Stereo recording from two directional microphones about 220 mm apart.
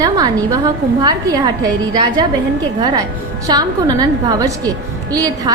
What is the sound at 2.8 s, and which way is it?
A woman's voice, 20° right (ahead or behind).